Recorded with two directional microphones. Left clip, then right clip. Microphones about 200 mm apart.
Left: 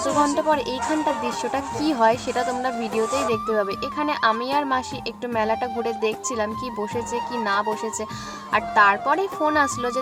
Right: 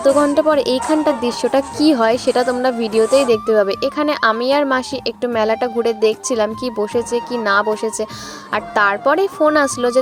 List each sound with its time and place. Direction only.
0.2 s a woman's voice: 30° right (ahead or behind)
8.5 s a woman's voice: 30° right (ahead or behind)